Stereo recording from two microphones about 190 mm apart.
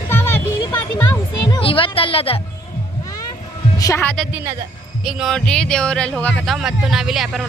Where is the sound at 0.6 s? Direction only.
20° left (ahead or behind).